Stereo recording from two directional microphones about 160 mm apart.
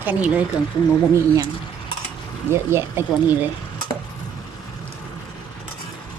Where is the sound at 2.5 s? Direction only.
15° right (ahead or behind).